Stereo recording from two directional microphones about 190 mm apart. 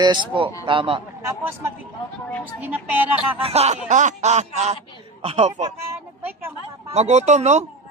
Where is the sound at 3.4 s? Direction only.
30° right (ahead or behind).